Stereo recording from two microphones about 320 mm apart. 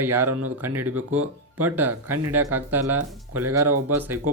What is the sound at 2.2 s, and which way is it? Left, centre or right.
Speech, centre.